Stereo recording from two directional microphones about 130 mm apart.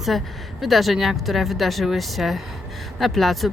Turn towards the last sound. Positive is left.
turn(degrees=0)  # may be behind; listen again after turning